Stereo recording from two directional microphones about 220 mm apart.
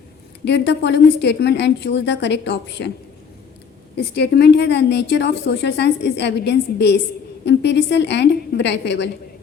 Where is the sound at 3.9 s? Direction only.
50° left (ahead or behind).